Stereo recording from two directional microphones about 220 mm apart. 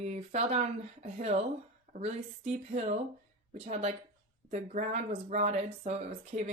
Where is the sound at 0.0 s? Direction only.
30° right (ahead or behind).